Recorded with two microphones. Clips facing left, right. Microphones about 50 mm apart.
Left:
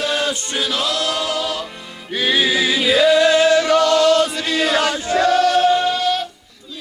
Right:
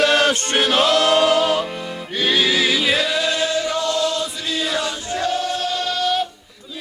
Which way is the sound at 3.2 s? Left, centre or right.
Left.